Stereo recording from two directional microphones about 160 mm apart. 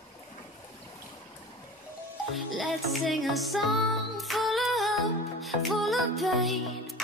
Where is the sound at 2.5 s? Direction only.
Centre (ahead or behind).